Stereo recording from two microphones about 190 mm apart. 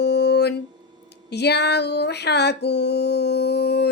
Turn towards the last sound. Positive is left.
turn(degrees=60)  # may be behind; listen again after turning